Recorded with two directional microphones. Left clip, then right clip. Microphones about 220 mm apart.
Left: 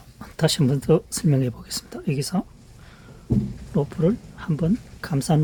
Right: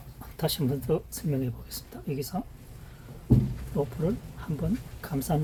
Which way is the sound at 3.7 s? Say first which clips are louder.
Left 7 dB; 50° left (ahead or behind).